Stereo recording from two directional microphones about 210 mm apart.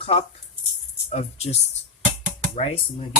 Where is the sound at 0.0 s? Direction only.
30° left (ahead or behind).